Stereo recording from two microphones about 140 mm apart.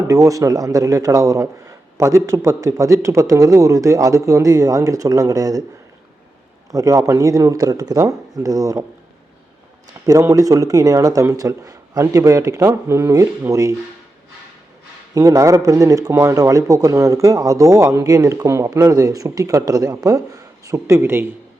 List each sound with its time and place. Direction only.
0.1 s speech: 25° right (ahead or behind)
6.7 s speech: 25° right (ahead or behind)
10.1 s speech: 20° right (ahead or behind)
15.1 s speech: 25° right (ahead or behind)